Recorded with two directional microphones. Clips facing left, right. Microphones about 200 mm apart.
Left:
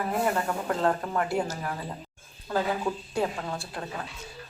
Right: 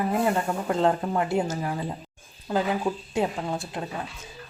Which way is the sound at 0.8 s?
20° right (ahead or behind).